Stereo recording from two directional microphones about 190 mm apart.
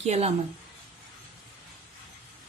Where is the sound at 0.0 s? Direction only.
35° right (ahead or behind).